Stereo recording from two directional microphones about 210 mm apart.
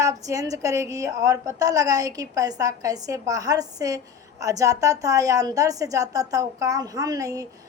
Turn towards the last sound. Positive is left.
turn(degrees=-15)  # may be behind; listen again after turning